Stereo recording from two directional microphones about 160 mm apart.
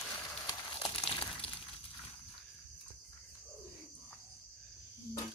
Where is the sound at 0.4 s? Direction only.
30° left (ahead or behind).